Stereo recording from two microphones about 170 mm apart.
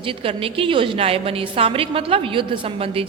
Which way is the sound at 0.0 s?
30° right (ahead or behind).